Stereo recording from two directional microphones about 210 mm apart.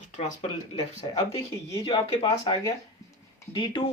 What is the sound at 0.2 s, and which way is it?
Speech, 30° left (ahead or behind).